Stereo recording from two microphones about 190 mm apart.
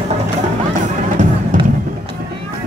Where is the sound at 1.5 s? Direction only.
45° right (ahead or behind).